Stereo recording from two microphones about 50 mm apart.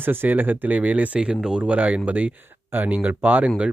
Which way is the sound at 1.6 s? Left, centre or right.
Right.